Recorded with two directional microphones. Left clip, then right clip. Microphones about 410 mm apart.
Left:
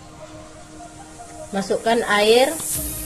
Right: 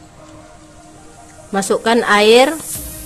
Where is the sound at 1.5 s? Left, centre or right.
Centre.